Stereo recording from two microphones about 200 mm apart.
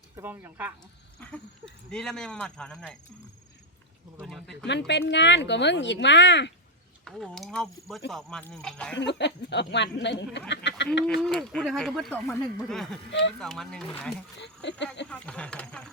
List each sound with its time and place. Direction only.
0.2 s speech: 10° right (ahead or behind)
1.2 s speech: 5° left (ahead or behind)
4.2 s speech: centre (ahead or behind)
4.9 s speech: 60° left (ahead or behind)
7.0 s speech: centre (ahead or behind)
9.0 s speech: 60° left (ahead or behind)
11.0 s speech: centre (ahead or behind)
13.1 s speech: 65° left (ahead or behind)
13.4 s speech: centre (ahead or behind)
14.4 s speech: 60° left (ahead or behind)
15.1 s speech: 5° left (ahead or behind)